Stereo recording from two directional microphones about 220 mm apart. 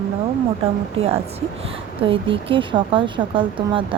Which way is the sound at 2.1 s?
25° right (ahead or behind).